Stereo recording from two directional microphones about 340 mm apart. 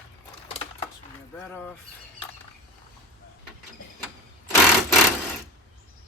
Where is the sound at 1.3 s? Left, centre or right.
Centre.